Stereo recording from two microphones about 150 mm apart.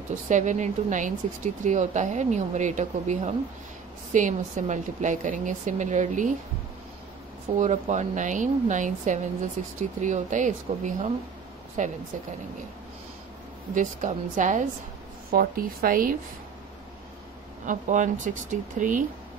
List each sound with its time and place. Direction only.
0.1 s speech: 55° right (ahead or behind)
7.5 s speech: 55° right (ahead or behind)
13.7 s speech: 60° right (ahead or behind)
15.3 s speech: 75° right (ahead or behind)
17.6 s speech: 55° right (ahead or behind)